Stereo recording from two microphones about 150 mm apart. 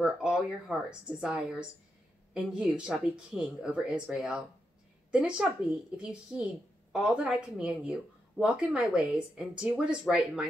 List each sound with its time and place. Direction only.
0.0 s speech: 5° right (ahead or behind)